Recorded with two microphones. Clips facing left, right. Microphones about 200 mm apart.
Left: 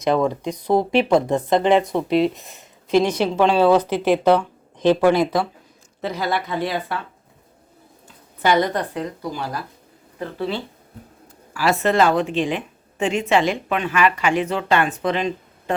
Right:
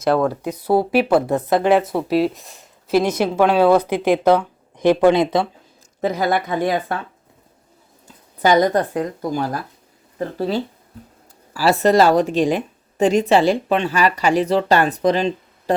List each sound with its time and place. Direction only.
0.2 s speech: 5° right (ahead or behind); by 5.5 s 25° right (ahead or behind)
6.0 s a woman's voice: 45° right (ahead or behind)
8.4 s a woman's voice: 40° right (ahead or behind)